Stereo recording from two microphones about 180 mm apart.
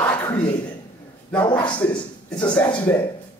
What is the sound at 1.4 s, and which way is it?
Speech, 25° left (ahead or behind).